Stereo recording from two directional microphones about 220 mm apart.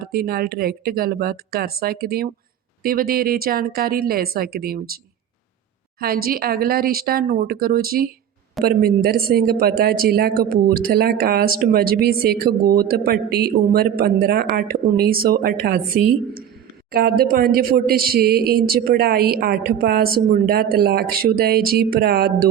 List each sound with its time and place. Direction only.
0.0 s speech: 45° right (ahead or behind)
6.0 s speech: 45° right (ahead or behind)
16.9 s speech: 45° right (ahead or behind)